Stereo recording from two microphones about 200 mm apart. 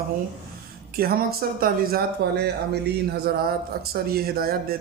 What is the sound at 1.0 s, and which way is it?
Speech, 45° right (ahead or behind).